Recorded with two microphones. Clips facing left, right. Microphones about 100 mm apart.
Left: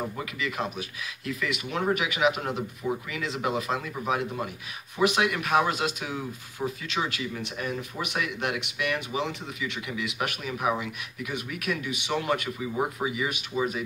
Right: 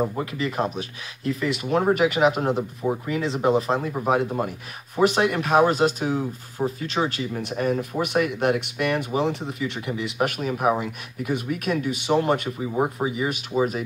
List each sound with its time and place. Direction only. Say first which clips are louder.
0.1 s speech: right 6 dB; 40° right (ahead or behind)